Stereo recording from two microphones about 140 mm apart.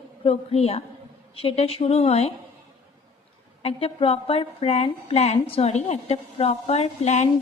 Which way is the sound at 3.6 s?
45° left (ahead or behind).